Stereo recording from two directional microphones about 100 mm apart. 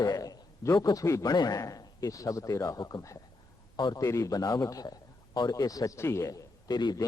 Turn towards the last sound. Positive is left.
turn(degrees=45)  # may be behind; listen again after turning